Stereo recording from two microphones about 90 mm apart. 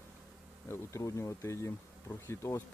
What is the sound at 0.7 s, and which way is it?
Bee, 35° left (ahead or behind).